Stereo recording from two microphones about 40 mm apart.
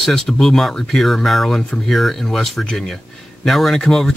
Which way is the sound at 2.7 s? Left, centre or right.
Centre.